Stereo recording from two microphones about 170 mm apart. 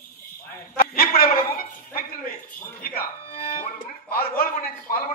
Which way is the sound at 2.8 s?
60° left (ahead or behind).